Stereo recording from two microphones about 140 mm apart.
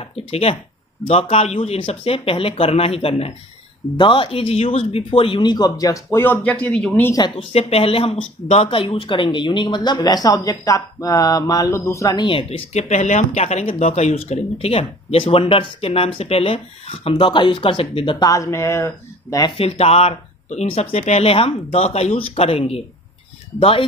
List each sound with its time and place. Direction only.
0.0 s speech: 45° left (ahead or behind); by 7.1 s 10° left (ahead or behind)
7.1 s speech: 30° left (ahead or behind)
12.3 s speech: 40° left (ahead or behind)
18.2 s speech: 25° left (ahead or behind)
19.5 s speech: 45° left (ahead or behind)